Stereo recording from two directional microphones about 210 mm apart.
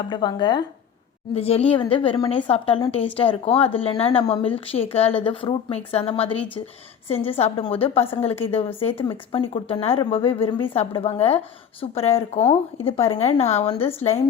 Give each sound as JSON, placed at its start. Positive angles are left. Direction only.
{"t": 0.0, "sound": "speech", "side_deg": 20}